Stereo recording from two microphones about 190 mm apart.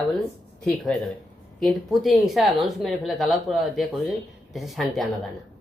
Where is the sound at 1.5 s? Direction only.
Centre (ahead or behind).